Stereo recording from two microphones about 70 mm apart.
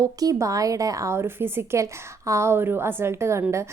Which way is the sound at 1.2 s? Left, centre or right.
Right.